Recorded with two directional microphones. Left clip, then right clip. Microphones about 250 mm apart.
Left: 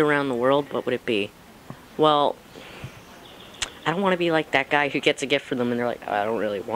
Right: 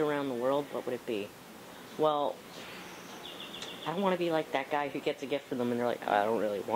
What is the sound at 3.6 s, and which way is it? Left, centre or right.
Speech, left.